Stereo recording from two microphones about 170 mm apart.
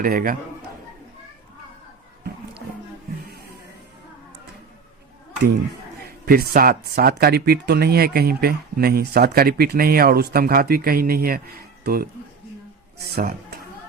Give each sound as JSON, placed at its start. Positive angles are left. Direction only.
{"t": 0.0, "sound": "speech", "side_deg": -55}
{"t": 6.1, "sound": "speech", "side_deg": -60}
{"t": 13.1, "sound": "speech", "side_deg": -65}